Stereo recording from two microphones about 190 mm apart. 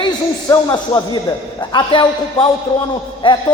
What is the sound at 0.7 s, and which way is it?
A man's voice, 20° left (ahead or behind).